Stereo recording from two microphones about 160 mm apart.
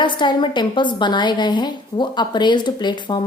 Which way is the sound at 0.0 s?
30° left (ahead or behind).